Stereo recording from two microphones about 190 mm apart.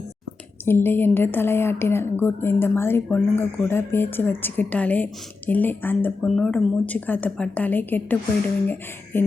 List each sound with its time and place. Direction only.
0.6 s a woman's voice: 10° left (ahead or behind)